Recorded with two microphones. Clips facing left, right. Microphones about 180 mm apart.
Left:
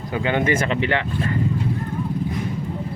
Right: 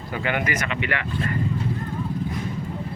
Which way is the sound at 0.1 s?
20° left (ahead or behind).